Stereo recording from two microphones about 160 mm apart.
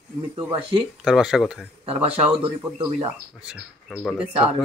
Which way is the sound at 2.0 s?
40° right (ahead or behind).